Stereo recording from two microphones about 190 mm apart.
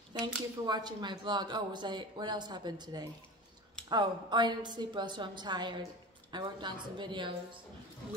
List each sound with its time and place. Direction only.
0.2 s speech: 20° right (ahead or behind)